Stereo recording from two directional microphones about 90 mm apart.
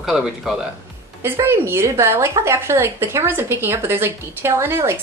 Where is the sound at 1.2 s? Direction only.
25° right (ahead or behind).